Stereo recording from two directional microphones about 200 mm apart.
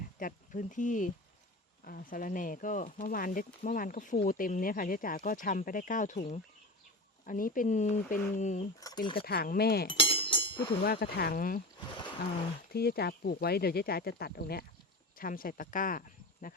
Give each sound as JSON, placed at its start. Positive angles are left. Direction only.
{"t": 0.2, "sound": "speech", "side_deg": 40}
{"t": 6.1, "sound": "speech", "side_deg": 30}
{"t": 7.3, "sound": "speech", "side_deg": 45}
{"t": 8.8, "sound": "speech", "side_deg": 20}
{"t": 9.2, "sound": "speech", "side_deg": 50}
{"t": 9.9, "sound": "a sound", "side_deg": 25}
{"t": 10.8, "sound": "speech", "side_deg": 50}
{"t": 12.7, "sound": "speech", "side_deg": 50}